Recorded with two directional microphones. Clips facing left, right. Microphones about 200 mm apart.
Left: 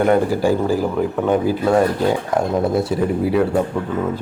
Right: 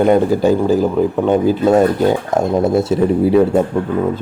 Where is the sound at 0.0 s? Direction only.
20° right (ahead or behind).